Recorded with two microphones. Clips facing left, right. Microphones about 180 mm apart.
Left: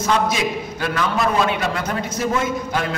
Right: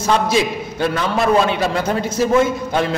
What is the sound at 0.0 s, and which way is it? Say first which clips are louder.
A man's voice: right 3 dB; 30° right (ahead or behind).